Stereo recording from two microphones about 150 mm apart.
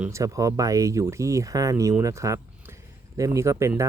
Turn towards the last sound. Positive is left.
turn(degrees=-20)  # may be behind; listen again after turning